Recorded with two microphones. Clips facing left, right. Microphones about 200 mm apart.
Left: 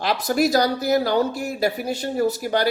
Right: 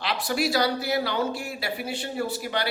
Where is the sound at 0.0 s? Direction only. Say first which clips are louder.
Left 6 dB; 45° left (ahead or behind).